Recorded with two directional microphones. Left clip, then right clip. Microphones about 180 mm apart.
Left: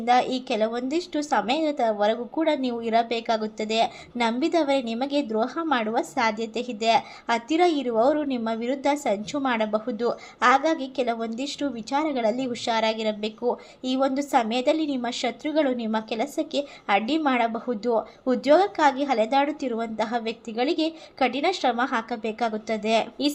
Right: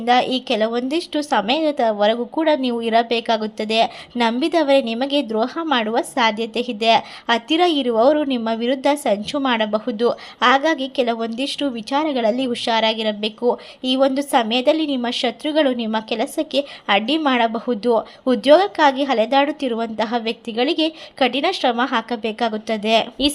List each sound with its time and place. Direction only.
0.0 s a woman's voice: 25° right (ahead or behind)